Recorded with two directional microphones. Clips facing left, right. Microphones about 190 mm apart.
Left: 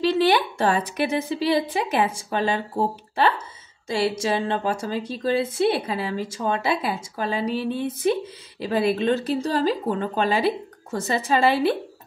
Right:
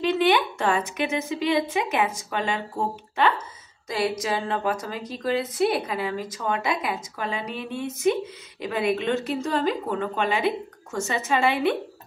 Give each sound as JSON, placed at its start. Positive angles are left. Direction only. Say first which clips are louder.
{"t": 0.0, "sound": "a woman's voice", "louder": "left 2 dB", "side_deg": 35}